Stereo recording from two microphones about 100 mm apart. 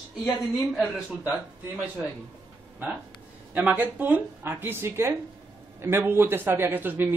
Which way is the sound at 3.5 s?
15° right (ahead or behind).